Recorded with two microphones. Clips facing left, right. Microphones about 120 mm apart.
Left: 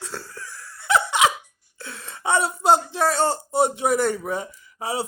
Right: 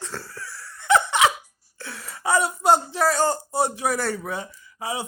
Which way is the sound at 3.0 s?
25° left (ahead or behind).